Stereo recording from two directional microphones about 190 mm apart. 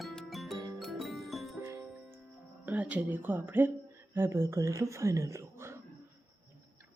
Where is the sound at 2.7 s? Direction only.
10° right (ahead or behind).